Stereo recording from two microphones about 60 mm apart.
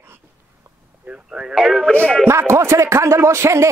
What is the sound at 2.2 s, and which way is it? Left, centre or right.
Speech, right.